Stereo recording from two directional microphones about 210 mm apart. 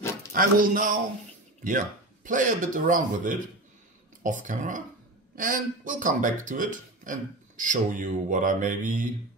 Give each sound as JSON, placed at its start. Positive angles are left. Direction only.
{"t": 0.3, "sound": "speech", "side_deg": -40}